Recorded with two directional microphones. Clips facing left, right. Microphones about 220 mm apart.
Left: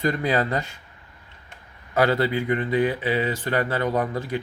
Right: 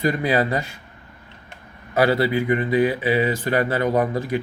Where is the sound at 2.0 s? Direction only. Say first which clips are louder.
Right 2 dB; 10° right (ahead or behind).